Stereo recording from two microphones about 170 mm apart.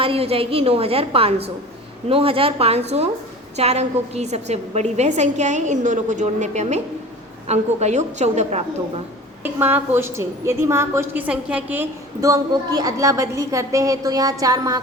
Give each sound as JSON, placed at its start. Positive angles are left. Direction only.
{"t": 0.0, "sound": "a woman's voice", "side_deg": -35}
{"t": 9.4, "sound": "a woman's voice", "side_deg": -10}